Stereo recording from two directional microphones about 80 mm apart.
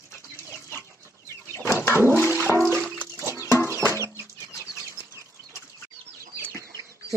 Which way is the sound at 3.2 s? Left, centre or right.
Right.